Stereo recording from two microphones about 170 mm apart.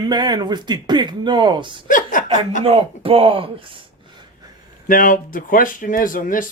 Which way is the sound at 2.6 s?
35° right (ahead or behind).